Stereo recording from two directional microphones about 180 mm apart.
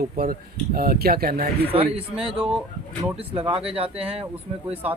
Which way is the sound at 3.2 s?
30° right (ahead or behind).